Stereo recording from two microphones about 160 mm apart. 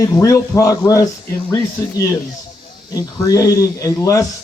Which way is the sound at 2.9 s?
20° left (ahead or behind).